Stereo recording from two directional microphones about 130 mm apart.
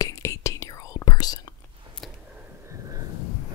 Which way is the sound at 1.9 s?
40° right (ahead or behind).